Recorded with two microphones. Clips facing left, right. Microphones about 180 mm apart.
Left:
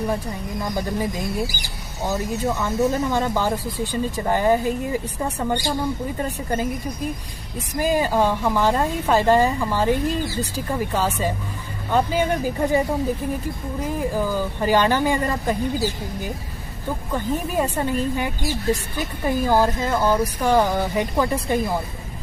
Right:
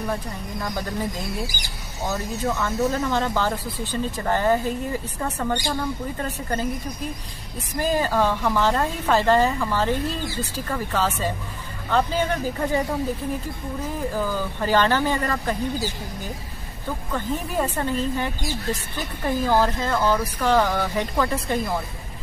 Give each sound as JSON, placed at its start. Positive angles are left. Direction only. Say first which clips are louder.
{"t": 0.6, "sound": "speech", "louder": "left 3 dB", "side_deg": 15}
{"t": 2.0, "sound": "speech", "louder": "left 2 dB", "side_deg": 15}
{"t": 7.8, "sound": "speech", "louder": "left 2 dB", "side_deg": 15}
{"t": 14.1, "sound": "speech", "louder": "left 3 dB", "side_deg": 15}
{"t": 17.1, "sound": "speech", "louder": "left 3 dB", "side_deg": 10}